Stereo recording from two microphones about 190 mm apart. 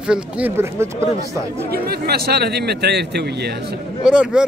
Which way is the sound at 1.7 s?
55° right (ahead or behind).